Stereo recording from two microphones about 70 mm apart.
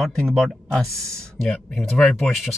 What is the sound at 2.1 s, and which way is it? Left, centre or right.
Speech, centre.